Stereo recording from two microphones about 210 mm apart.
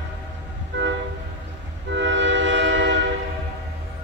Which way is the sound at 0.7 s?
60° right (ahead or behind).